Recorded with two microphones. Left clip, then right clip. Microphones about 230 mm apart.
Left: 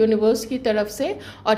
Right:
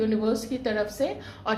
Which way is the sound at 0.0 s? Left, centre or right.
Left.